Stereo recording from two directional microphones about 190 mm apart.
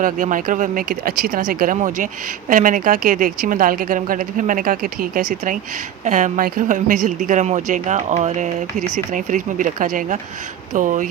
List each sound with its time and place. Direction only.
0.0 s speech: 45° right (ahead or behind)